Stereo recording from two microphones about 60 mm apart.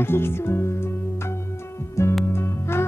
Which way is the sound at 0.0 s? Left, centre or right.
Left.